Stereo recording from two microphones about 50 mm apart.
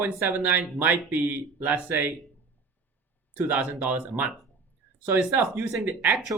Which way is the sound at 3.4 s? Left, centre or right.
Right.